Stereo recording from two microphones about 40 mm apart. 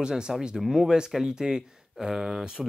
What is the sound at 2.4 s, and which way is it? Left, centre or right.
Speech, centre.